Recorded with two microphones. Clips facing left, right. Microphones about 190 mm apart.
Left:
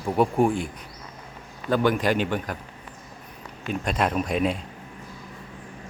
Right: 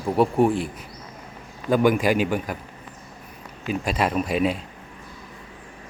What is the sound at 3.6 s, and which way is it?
Speech, 5° right (ahead or behind).